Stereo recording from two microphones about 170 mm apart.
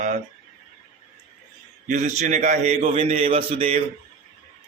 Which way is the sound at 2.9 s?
35° right (ahead or behind).